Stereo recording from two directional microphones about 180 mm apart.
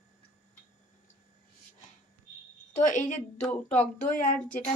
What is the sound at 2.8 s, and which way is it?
Speech, 45° left (ahead or behind).